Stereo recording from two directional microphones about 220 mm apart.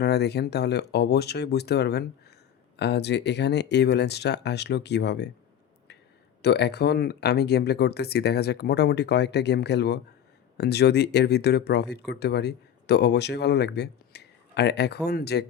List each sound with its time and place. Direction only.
0.0 s speech: 50° left (ahead or behind)
6.4 s speech: 50° left (ahead or behind)